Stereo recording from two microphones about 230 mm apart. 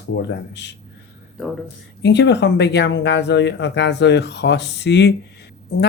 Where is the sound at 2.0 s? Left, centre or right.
Left.